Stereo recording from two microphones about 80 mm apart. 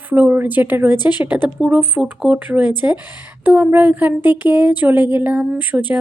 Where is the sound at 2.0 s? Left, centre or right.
Centre.